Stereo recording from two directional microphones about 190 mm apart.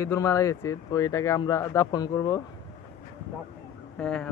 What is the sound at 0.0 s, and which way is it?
Speech, 15° left (ahead or behind).